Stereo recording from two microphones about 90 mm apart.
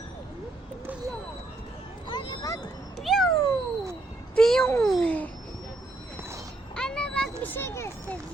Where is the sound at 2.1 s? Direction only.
55° left (ahead or behind).